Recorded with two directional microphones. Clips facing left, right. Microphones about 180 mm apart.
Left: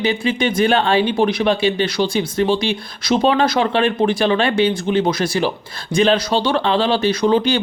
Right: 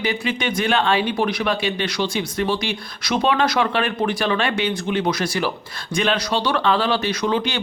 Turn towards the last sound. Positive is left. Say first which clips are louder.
# left 6 dB
turn(degrees=30)  # may be behind; listen again after turning